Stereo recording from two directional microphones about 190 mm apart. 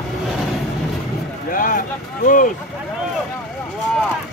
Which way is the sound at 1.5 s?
45° left (ahead or behind).